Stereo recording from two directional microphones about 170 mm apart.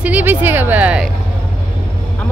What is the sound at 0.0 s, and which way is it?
Speech, 10° right (ahead or behind).